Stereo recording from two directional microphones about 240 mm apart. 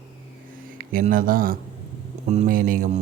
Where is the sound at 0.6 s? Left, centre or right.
Right.